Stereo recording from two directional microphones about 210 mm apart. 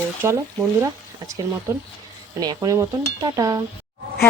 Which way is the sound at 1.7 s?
10° right (ahead or behind).